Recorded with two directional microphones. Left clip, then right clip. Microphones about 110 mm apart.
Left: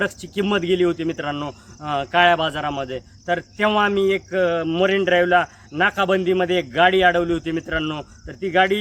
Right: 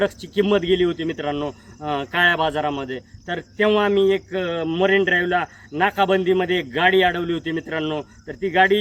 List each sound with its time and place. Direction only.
0.0 s speech: 35° left (ahead or behind)